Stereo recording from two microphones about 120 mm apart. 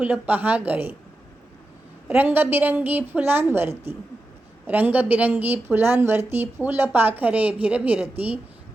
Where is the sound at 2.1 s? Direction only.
15° right (ahead or behind).